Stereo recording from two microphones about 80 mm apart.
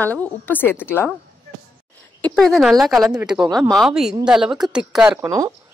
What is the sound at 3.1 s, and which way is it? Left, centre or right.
Speech, right.